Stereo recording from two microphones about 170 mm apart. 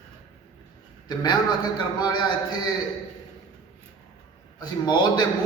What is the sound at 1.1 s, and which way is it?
A man's voice, 25° left (ahead or behind).